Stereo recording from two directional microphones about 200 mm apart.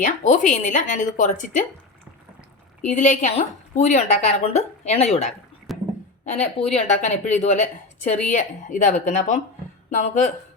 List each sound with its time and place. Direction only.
0.0 s a woman's voice: 40° left (ahead or behind)
2.8 s a woman's voice: 40° left (ahead or behind)
5.7 s a sound: centre (ahead or behind)
6.7 s a woman's voice: 35° left (ahead or behind)